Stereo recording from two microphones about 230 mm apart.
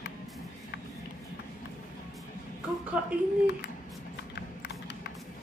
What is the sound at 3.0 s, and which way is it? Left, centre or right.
Speech, centre.